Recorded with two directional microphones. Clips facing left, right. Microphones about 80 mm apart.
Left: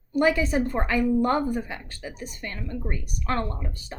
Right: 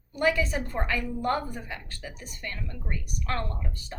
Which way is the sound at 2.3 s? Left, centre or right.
Left.